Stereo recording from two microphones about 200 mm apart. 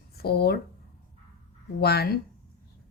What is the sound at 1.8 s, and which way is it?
Speech, 50° left (ahead or behind).